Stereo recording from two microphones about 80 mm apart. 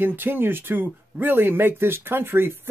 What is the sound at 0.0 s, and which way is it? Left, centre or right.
Speech, right.